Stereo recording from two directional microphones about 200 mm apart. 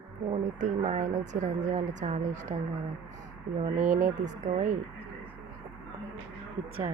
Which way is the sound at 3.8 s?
40° right (ahead or behind).